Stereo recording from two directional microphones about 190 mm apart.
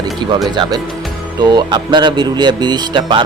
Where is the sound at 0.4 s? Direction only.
20° right (ahead or behind).